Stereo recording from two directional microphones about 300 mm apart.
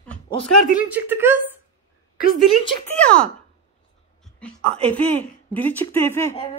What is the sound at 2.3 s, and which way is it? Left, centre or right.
Speech, centre.